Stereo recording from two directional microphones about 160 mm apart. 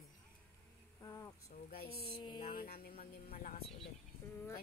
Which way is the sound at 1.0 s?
20° left (ahead or behind).